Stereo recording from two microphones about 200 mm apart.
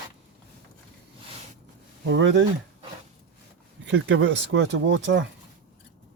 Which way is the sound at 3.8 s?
65° right (ahead or behind).